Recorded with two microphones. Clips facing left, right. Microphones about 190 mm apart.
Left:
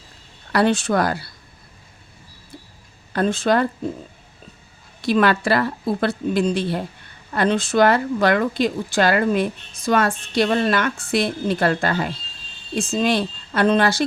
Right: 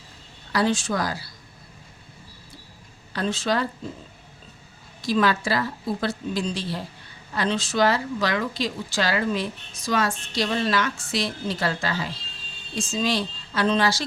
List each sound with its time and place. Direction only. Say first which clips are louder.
0.5 s speech: left 5 dB; 60° left (ahead or behind)
3.1 s speech: left 6 dB; 50° left (ahead or behind)
5.0 s speech: left 5 dB; 60° left (ahead or behind)